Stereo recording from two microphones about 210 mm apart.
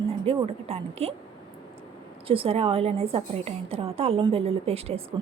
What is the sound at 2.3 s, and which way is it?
A woman's voice, 25° right (ahead or behind).